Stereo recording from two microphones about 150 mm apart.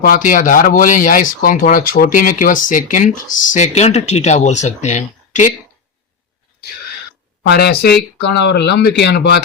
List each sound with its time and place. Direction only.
0.0 s speech: 65° left (ahead or behind)
7.4 s speech: 90° left